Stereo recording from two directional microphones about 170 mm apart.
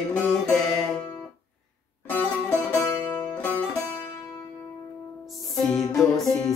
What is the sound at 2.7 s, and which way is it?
Music, 15° left (ahead or behind).